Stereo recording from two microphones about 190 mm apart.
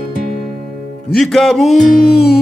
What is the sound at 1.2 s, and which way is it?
Music, centre (ahead or behind).